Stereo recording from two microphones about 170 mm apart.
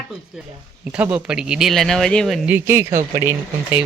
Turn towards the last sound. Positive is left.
turn(degrees=-15)  # may be behind; listen again after turning